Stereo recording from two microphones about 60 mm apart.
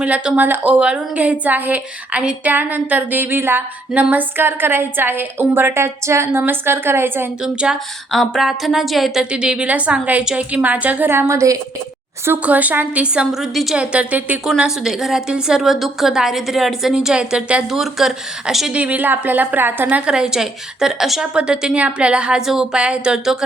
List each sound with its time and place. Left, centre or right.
0.0 s a woman's voice: right
5.8 s speech: right
6.4 s a woman's voice: right
7.4 s a woman's voice: centre
8.1 s speech: centre
9.3 s a woman's voice: centre
11.3 s a woman's voice: right
12.4 s a woman's voice: right
13.3 s speech: centre
13.7 s a woman's voice: centre
14.6 s a woman's voice: centre
17.7 s speech: centre
18.7 s a woman's voice: right
20.0 s a woman's voice: centre